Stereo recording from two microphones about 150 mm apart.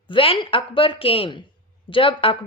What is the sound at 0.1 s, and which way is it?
A woman's voice, 35° left (ahead or behind).